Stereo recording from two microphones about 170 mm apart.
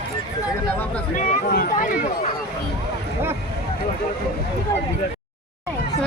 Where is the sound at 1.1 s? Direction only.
55° left (ahead or behind).